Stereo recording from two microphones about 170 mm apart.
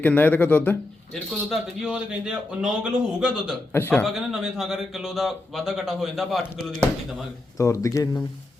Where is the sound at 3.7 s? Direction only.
15° left (ahead or behind).